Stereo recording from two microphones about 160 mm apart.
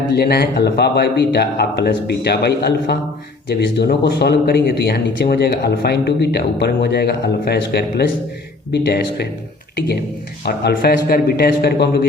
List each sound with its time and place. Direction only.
0.1 s speech: 85° left
10.4 s a man's voice: 85° left